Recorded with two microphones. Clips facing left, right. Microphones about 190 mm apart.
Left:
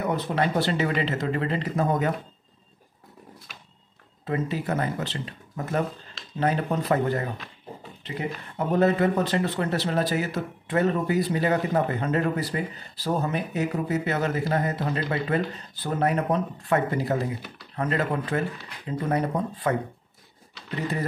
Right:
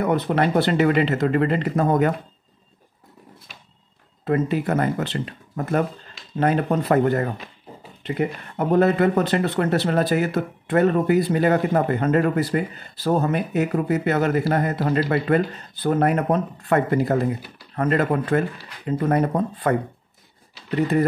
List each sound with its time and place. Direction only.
0.0 s speech: 60° right (ahead or behind)
4.2 s speech: 60° right (ahead or behind)
6.3 s speech: 55° right (ahead or behind)